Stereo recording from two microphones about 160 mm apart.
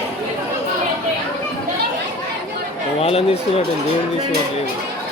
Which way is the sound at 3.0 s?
40° left (ahead or behind).